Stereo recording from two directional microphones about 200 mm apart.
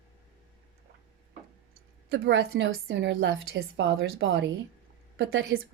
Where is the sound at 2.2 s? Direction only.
70° right (ahead or behind).